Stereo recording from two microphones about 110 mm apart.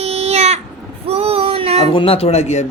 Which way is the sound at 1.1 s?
60° right (ahead or behind).